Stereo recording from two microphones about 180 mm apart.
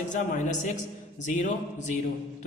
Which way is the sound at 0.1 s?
45° left (ahead or behind).